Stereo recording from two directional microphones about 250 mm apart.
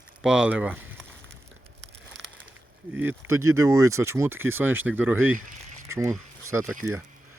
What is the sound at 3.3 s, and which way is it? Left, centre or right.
Speech, centre.